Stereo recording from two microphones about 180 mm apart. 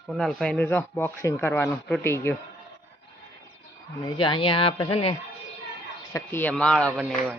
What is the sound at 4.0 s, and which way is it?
Speech, 30° left (ahead or behind).